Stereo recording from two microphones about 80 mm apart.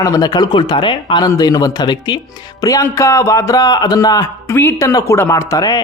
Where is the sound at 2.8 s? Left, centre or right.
Left.